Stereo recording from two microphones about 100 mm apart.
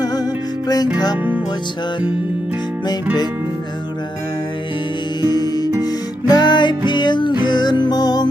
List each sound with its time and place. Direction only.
0.0 s music: 40° left (ahead or behind)
5.2 s music: 45° left (ahead or behind)